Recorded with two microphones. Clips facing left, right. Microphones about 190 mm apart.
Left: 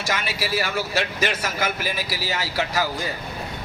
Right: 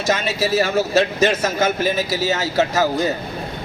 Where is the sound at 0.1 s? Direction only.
25° right (ahead or behind).